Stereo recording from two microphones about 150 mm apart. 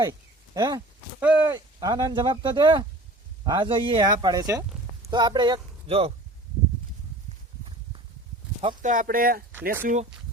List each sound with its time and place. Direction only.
0.0 s a sound: 25° right (ahead or behind)
1.2 s speech: 10° right (ahead or behind)
1.5 s speech: 25° right (ahead or behind)
5.9 s speech: 40° right (ahead or behind)
8.8 s speech: 60° right (ahead or behind)
9.8 s speech: 55° right (ahead or behind)